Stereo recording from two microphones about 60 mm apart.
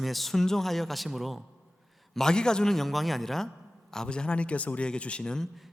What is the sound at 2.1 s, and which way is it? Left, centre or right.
A man's voice, centre.